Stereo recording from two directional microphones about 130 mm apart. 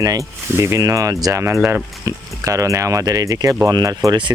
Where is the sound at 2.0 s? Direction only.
25° right (ahead or behind).